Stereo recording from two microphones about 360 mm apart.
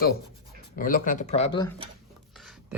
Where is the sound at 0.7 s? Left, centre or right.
Left.